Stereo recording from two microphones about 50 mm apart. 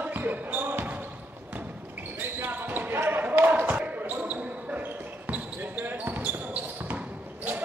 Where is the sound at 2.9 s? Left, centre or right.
Right.